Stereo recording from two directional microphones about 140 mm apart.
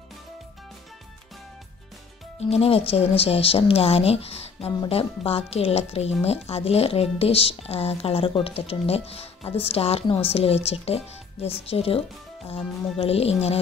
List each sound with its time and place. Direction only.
2.5 s speech: 45° left (ahead or behind)